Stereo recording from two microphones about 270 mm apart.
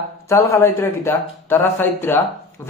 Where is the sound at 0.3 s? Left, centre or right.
Centre.